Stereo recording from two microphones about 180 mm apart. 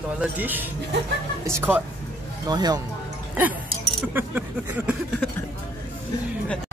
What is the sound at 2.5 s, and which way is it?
Speech, 20° right (ahead or behind).